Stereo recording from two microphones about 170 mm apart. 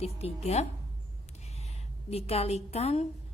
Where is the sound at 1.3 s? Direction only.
40° left (ahead or behind).